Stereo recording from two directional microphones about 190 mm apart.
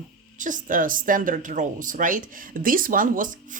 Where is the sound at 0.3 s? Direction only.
45° right (ahead or behind).